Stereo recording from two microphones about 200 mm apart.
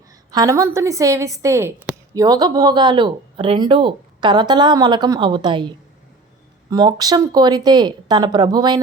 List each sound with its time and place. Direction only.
0.3 s a woman's voice: 20° right (ahead or behind)